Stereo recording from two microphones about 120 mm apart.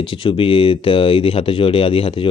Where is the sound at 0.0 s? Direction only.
45° left (ahead or behind).